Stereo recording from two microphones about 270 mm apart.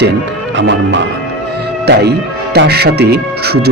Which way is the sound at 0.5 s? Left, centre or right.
Right.